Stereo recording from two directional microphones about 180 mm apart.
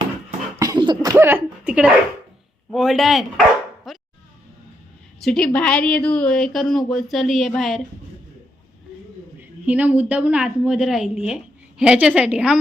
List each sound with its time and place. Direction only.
0.6 s beatboxing: 20° right (ahead or behind)
1.1 s speech: 10° right (ahead or behind)
3.9 s music: centre (ahead or behind)
5.2 s speech: 5° left (ahead or behind)
9.4 s speech: 10° right (ahead or behind)